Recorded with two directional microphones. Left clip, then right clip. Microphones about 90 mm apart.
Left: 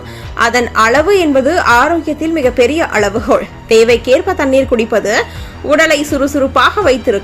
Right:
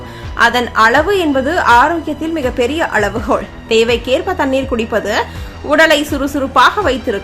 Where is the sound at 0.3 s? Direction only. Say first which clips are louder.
Even; 30° left (ahead or behind).